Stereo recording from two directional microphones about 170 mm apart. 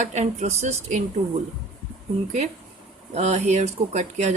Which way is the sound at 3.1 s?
40° right (ahead or behind).